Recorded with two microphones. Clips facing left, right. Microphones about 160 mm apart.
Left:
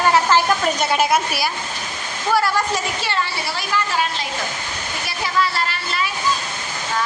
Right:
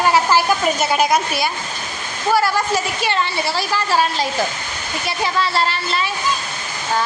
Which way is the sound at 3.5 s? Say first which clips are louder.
Right 2 dB; 35° right (ahead or behind).